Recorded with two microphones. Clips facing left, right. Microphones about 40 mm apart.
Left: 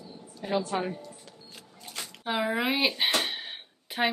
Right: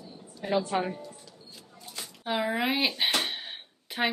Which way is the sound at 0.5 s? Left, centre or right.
Right.